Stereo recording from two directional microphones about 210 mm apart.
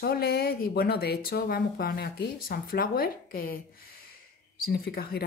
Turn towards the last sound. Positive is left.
turn(degrees=45)  # may be behind; listen again after turning